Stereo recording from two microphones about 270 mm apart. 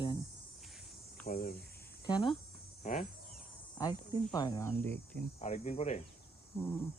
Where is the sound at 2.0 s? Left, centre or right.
Centre.